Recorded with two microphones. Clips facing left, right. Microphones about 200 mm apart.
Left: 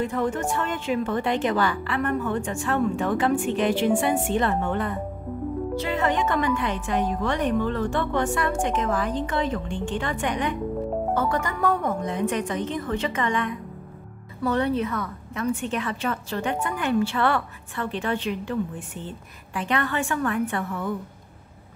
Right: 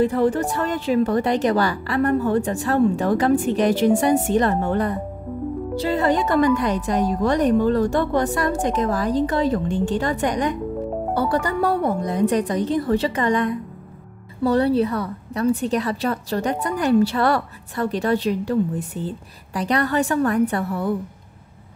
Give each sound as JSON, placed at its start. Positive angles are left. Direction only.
{"t": 0.0, "sound": "a woman's voice", "side_deg": -35}